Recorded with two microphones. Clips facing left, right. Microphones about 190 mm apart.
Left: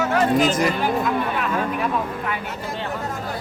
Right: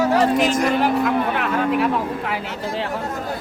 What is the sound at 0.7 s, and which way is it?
Speech, 70° right (ahead or behind).